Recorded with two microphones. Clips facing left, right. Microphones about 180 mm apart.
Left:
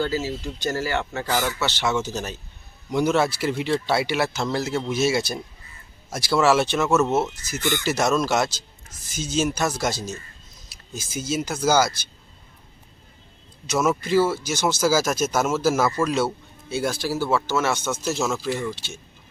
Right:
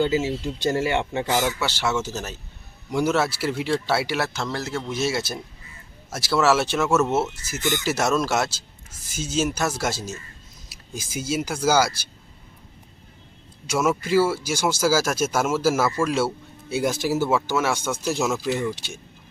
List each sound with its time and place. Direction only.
0.0 s speech: 20° right (ahead or behind); by 4.4 s centre (ahead or behind)
4.4 s a man's voice: 15° left (ahead or behind)
4.9 s speech: centre (ahead or behind)
13.7 s speech: 10° right (ahead or behind)